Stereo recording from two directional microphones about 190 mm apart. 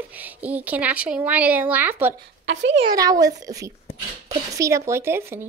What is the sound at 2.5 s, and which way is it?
Speech, 65° right (ahead or behind).